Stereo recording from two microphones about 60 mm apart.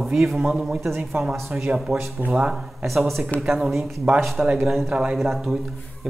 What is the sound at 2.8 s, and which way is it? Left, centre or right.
Speech, centre.